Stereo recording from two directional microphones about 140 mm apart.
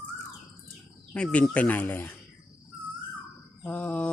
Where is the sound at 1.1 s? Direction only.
5° left (ahead or behind).